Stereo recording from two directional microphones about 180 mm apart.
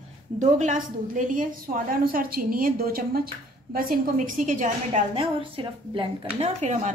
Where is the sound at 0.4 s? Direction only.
40° right (ahead or behind).